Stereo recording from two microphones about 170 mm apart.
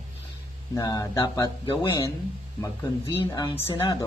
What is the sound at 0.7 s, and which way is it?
Speech, 20° left (ahead or behind).